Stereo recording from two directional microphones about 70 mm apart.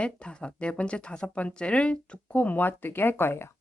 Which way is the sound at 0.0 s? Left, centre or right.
Centre.